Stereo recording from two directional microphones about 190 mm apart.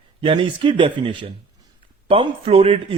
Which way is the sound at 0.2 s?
25° right (ahead or behind).